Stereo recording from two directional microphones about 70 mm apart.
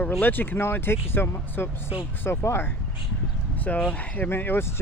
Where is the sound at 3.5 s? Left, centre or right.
Left.